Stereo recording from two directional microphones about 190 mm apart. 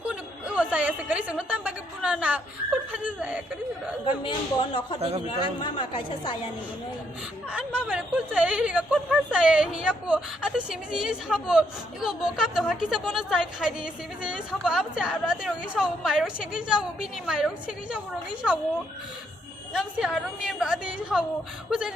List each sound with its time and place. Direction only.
0.0 s a sound: 5° right (ahead or behind)
2.9 s speech: 10° right (ahead or behind)
4.2 s a man's voice: 25° left (ahead or behind)
4.9 s a man's voice: 30° right (ahead or behind)
5.6 s a man's voice: 25° left (ahead or behind)
7.5 s speech: 5° right (ahead or behind)
19.7 s speech: centre (ahead or behind)